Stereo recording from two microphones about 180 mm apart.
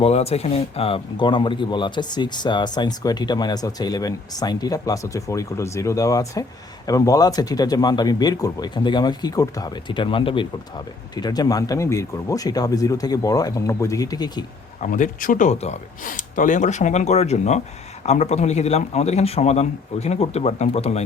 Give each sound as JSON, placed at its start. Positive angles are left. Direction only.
{"t": 0.0, "sound": "speech", "side_deg": 35}
{"t": 14.8, "sound": "a man's voice", "side_deg": 45}